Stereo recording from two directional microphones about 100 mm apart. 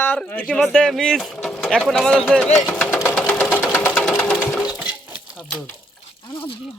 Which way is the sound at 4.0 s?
5° left (ahead or behind).